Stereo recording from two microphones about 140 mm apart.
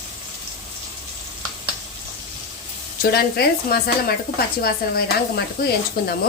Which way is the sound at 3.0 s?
90° left.